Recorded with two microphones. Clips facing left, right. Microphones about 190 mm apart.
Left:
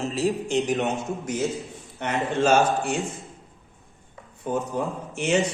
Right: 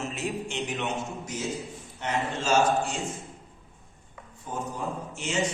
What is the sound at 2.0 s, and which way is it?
Speech, 65° left (ahead or behind).